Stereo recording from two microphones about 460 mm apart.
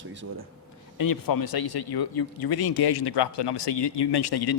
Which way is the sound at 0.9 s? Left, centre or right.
Left.